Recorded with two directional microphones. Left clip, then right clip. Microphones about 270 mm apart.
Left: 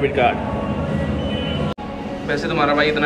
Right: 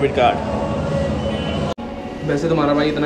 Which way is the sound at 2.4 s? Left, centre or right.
Centre.